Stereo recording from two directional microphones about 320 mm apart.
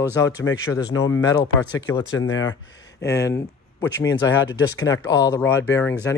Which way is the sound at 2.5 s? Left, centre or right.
Left.